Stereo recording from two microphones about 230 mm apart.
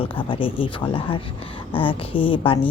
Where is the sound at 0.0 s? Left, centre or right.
Left.